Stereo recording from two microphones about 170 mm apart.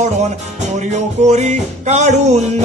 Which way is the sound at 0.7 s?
40° right (ahead or behind).